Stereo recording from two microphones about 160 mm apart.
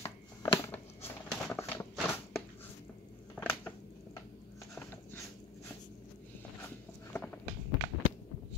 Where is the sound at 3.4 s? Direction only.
10° left (ahead or behind).